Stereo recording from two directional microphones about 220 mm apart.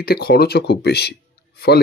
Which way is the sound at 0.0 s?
45° left (ahead or behind).